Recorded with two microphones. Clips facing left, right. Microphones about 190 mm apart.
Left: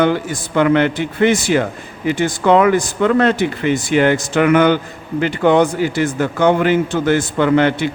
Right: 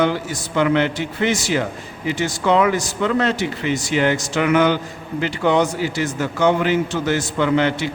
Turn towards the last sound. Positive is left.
turn(degrees=55)  # may be behind; listen again after turning